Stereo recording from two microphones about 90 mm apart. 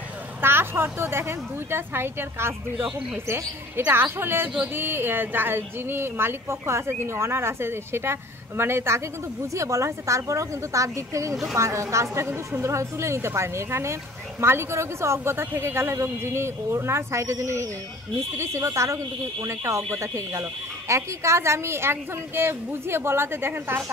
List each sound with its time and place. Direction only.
0.4 s a woman's voice: 25° right (ahead or behind)